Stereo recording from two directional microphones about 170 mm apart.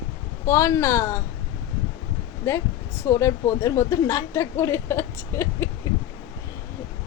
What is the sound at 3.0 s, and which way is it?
A woman's voice, 15° left (ahead or behind).